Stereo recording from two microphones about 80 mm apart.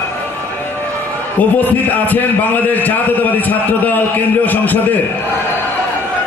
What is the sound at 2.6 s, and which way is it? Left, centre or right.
A man's voice, left.